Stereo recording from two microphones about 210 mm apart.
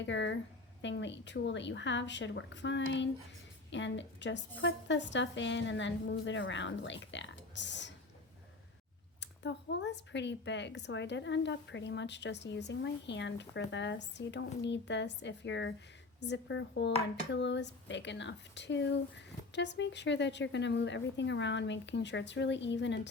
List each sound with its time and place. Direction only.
0.0 s speech: 60° left (ahead or behind)
9.2 s speech: 55° left (ahead or behind)